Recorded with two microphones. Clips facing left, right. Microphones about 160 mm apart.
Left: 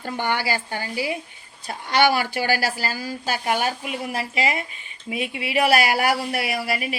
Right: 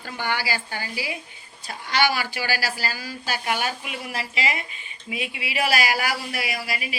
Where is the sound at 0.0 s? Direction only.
55° left (ahead or behind).